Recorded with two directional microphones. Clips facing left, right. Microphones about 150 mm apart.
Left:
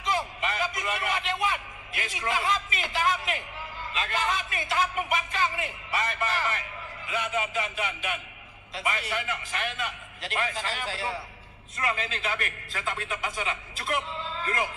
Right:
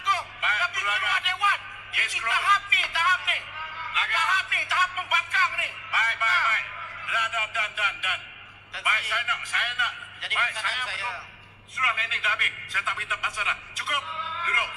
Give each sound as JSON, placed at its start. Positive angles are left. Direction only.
{"t": 0.0, "sound": "a man's voice", "side_deg": 25}